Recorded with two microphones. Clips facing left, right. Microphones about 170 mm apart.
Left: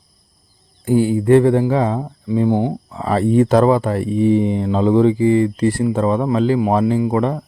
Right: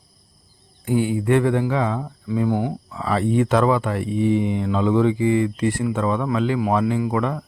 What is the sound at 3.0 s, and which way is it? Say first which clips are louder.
Speech: left 5 dB; 40° left (ahead or behind).